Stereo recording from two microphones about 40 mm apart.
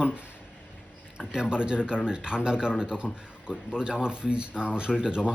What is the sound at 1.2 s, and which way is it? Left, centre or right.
Speech, centre.